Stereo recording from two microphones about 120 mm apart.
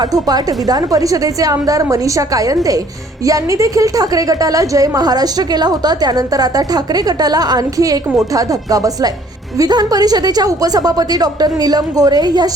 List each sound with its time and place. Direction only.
0.0 s a woman's voice: 30° right (ahead or behind)